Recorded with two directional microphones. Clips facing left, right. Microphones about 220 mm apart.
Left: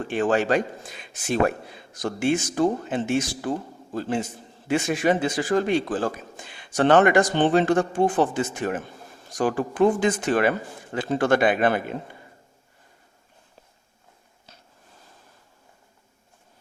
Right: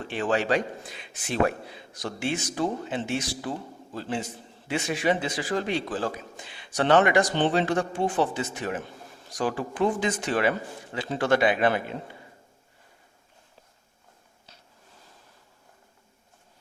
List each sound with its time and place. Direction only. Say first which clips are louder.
0.1 s a man's voice: left 3 dB; 50° left (ahead or behind)